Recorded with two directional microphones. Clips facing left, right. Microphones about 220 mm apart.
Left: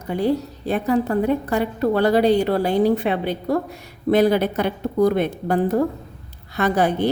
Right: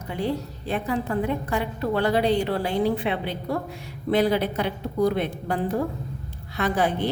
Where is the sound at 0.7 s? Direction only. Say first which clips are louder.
Left 6 dB; 40° left (ahead or behind).